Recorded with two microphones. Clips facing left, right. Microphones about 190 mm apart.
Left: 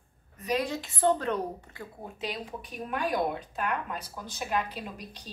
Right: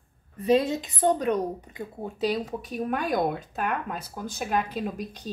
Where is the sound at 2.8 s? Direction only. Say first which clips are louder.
Right 3 dB; 45° right (ahead or behind).